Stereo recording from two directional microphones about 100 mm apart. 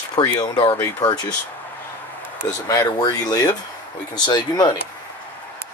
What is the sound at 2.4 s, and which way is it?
Speech, 35° left (ahead or behind).